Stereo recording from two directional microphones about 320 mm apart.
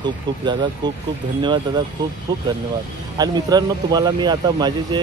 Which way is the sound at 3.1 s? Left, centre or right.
Centre.